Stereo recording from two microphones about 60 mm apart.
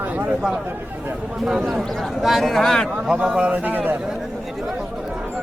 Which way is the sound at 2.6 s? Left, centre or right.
Centre.